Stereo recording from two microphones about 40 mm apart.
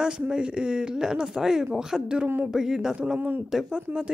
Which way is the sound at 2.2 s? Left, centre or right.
Right.